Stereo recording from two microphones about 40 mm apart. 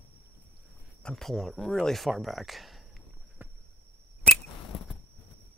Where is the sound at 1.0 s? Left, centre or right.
Left.